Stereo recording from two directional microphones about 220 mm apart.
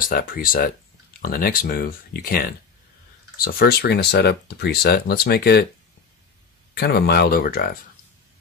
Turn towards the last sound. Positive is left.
turn(degrees=40)  # may be behind; listen again after turning